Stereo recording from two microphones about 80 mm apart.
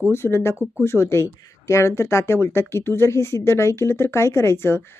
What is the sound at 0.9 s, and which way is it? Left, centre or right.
Speech, left.